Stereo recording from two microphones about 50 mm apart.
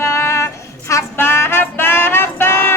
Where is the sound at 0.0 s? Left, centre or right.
Left.